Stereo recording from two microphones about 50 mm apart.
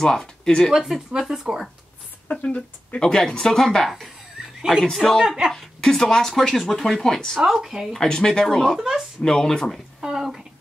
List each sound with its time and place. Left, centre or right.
0.0 s speech: centre
0.7 s speech: centre
2.2 s speech: left
3.0 s speech: centre
4.4 s neigh: centre
4.9 s a woman's voice: centre
5.2 s speech: centre
5.8 s speech: centre
7.3 s speech: centre
8.0 s speech: centre
8.7 s speech: centre
9.2 s speech: centre
10.0 s speech: centre